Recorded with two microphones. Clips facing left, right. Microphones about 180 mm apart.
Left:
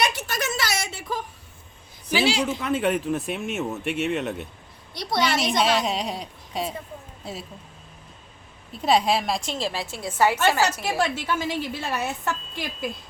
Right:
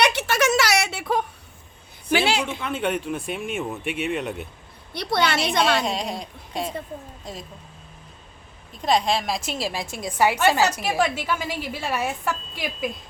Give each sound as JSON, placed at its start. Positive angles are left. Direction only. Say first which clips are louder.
{"t": 0.0, "sound": "a sound", "louder": "right 5 dB", "side_deg": -70}
{"t": 2.0, "sound": "a woman's voice", "louder": "right 1 dB", "side_deg": -55}
{"t": 2.6, "sound": "speech", "louder": "left 2 dB", "side_deg": 0}
{"t": 4.9, "sound": "a woman's voice", "louder": "right 1 dB", "side_deg": -65}
{"t": 5.5, "sound": "a woman's voice", "louder": "right 1 dB", "side_deg": 5}
{"t": 8.8, "sound": "a woman's voice", "louder": "left 1 dB", "side_deg": 10}